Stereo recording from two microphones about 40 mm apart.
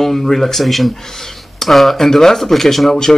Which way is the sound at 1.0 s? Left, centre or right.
Centre.